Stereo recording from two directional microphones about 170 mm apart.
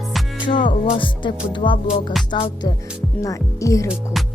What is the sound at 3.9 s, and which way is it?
Speech, centre (ahead or behind).